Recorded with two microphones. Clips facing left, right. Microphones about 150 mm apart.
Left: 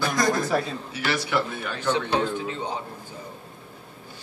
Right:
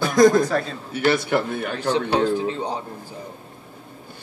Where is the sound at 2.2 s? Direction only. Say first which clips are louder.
Right 6 dB; 35° right (ahead or behind).